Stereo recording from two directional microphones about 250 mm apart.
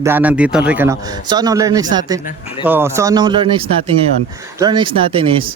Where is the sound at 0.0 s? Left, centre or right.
Centre.